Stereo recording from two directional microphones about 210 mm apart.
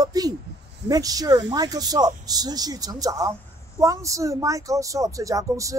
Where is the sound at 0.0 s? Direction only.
15° right (ahead or behind).